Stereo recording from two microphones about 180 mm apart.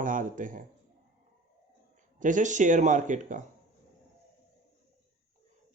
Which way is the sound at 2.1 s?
45° right (ahead or behind).